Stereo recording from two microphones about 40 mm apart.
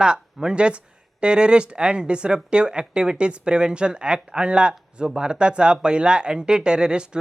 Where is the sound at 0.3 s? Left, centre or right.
Right.